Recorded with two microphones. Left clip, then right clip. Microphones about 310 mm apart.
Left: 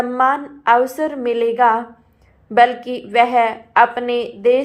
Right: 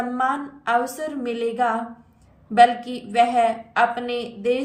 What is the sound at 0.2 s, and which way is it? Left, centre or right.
A woman's voice, centre.